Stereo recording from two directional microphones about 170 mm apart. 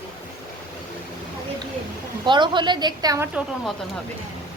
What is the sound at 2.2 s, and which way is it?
A woman's voice, 25° right (ahead or behind).